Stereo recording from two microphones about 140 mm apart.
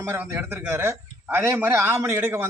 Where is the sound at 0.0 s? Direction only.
20° right (ahead or behind).